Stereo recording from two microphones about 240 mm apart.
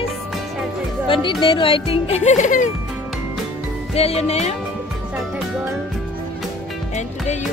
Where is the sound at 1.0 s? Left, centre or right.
Left.